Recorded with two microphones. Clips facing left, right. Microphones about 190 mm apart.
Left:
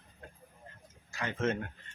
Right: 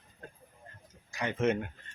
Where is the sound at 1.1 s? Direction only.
15° right (ahead or behind).